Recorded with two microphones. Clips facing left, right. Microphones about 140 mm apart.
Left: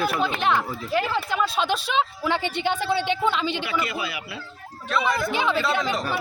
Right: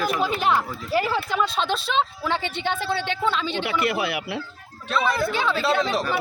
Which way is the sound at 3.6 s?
65° right (ahead or behind).